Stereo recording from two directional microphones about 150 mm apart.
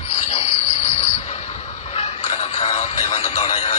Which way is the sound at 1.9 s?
45° left (ahead or behind).